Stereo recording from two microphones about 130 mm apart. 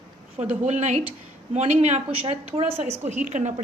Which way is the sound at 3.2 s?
65° right (ahead or behind).